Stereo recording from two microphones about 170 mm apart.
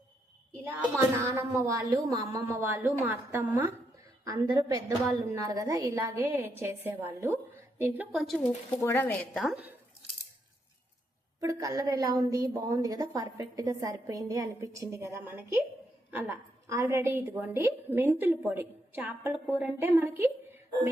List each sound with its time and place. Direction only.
0.6 s a woman's voice: 15° right (ahead or behind)
8.1 s speech: centre (ahead or behind)
8.7 s a woman's voice: 15° left (ahead or behind)
9.4 s speech: 5° right (ahead or behind)
11.3 s a woman's voice: 20° right (ahead or behind)